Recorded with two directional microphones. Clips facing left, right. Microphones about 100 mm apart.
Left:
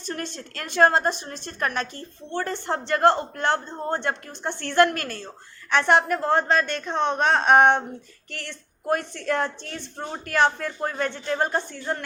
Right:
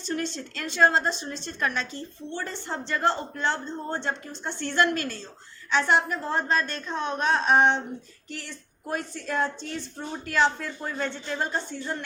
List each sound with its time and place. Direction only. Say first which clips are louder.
0.0 s a woman's voice: right 2 dB; 50° left (ahead or behind)